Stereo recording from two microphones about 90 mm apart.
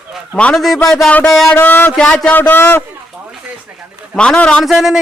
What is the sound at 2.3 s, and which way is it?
Speech, 20° left (ahead or behind).